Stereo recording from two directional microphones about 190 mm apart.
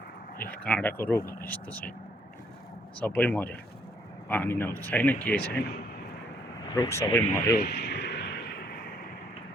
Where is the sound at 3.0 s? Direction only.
10° left (ahead or behind).